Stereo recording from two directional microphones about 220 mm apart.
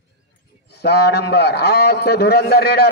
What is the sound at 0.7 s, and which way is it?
A man's voice, 45° left (ahead or behind).